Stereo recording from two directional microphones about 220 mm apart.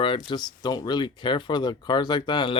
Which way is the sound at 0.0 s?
25° left (ahead or behind).